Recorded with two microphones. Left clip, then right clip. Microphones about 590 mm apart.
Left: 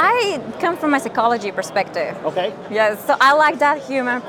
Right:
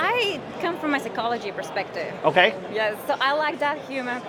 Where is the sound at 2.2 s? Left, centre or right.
Right.